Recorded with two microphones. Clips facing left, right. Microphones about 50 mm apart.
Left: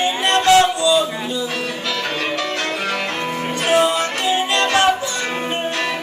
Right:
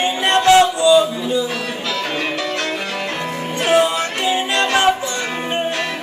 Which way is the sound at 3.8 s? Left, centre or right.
Right.